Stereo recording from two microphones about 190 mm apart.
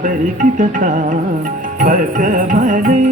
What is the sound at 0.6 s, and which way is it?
Music, 40° right (ahead or behind).